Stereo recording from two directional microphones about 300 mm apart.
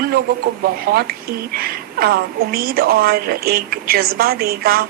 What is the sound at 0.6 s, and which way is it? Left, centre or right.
A woman's voice, right.